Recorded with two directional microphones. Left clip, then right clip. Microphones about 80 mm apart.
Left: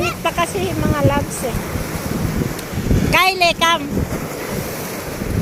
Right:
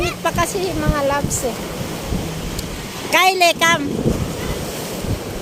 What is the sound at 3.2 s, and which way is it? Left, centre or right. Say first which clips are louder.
Speech: right 2 dB; right.